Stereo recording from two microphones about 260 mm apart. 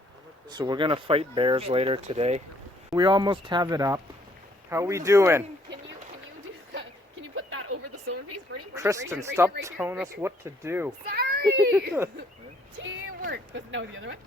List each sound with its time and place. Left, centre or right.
0.5 s speech: centre
6.7 s a sound: right
8.7 s speech: centre
11.1 s children playing: right
13.2 s speech: right